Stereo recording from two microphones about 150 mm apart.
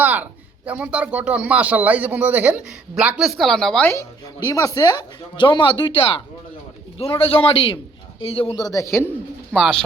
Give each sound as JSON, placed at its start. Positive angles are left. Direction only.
{"t": 0.0, "sound": "speech", "side_deg": -10}
{"t": 4.4, "sound": "speech", "side_deg": 25}
{"t": 8.6, "sound": "a man's voice", "side_deg": 20}
{"t": 9.6, "sound": "speech", "side_deg": 5}